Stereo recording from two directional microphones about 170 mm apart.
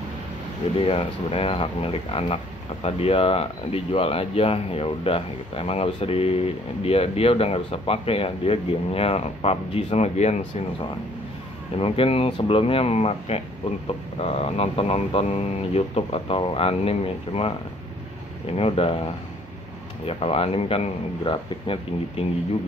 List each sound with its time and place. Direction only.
0.7 s speech: 35° left (ahead or behind)
11.8 s speech: 35° left (ahead or behind)
18.6 s speech: 35° left (ahead or behind)